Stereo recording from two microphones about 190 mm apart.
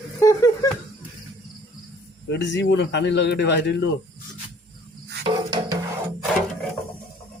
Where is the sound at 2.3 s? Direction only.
65° left (ahead or behind).